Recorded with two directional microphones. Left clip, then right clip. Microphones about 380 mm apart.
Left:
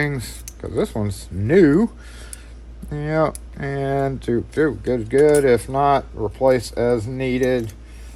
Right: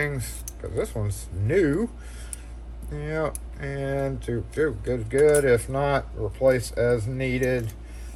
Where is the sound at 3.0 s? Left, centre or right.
Left.